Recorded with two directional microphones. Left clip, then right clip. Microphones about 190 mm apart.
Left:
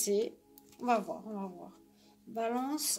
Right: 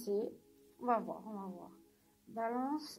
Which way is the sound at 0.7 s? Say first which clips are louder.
Left 4 dB; 40° left (ahead or behind).